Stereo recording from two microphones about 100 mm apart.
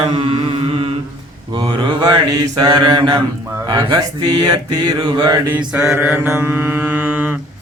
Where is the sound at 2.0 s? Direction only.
40° right (ahead or behind).